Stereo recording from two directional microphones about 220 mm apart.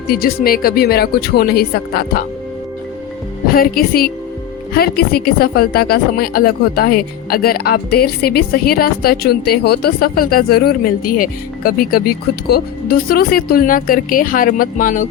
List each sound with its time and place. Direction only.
0.1 s a woman's voice: 45° left (ahead or behind)
3.5 s a woman's voice: 40° left (ahead or behind)